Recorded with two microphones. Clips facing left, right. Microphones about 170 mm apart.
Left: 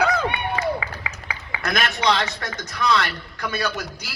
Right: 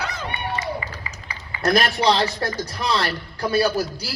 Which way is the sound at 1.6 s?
35° right (ahead or behind).